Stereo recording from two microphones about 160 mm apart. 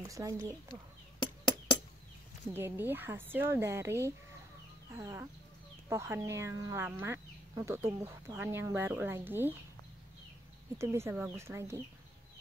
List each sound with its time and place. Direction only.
0.1 s speech: 20° right (ahead or behind)
2.5 s speech: 15° right (ahead or behind)
4.9 s speech: 15° right (ahead or behind)
10.8 s speech: 15° right (ahead or behind)